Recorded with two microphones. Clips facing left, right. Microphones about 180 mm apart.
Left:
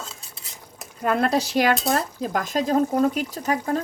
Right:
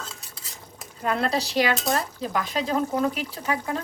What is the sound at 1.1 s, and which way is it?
Speech, 50° left (ahead or behind).